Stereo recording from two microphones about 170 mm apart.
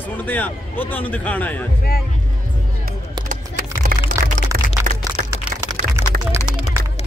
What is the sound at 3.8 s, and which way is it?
Music, 50° right (ahead or behind).